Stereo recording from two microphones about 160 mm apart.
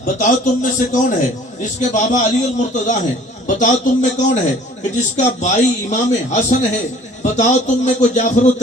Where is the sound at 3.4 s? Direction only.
50° left (ahead or behind).